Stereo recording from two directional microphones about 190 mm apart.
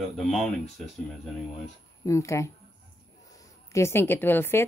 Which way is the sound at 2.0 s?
15° left (ahead or behind).